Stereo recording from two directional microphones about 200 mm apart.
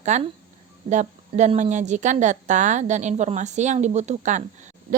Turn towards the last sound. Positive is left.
turn(degrees=-35)  # may be behind; listen again after turning